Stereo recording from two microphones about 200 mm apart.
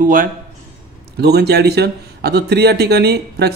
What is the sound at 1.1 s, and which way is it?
A man's voice, 55° right (ahead or behind).